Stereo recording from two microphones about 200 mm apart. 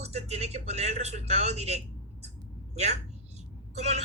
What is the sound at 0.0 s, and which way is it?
A woman's voice, 30° right (ahead or behind).